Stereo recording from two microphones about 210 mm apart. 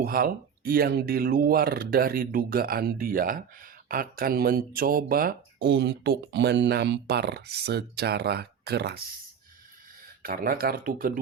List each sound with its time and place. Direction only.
0.0 s speech: 45° right (ahead or behind)
10.2 s speech: 45° right (ahead or behind)